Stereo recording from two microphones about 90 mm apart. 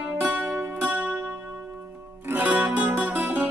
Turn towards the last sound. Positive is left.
turn(degrees=-20)  # may be behind; listen again after turning